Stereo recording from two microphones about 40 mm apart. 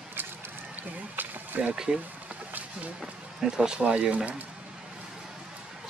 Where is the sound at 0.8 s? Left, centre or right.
Right.